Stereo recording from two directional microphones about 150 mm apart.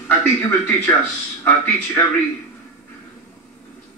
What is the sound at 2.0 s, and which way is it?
Speech, 15° left (ahead or behind).